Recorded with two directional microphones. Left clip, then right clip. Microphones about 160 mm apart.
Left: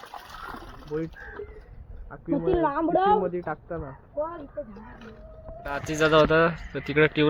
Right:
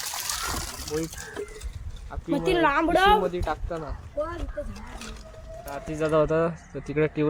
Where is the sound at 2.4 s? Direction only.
25° left (ahead or behind).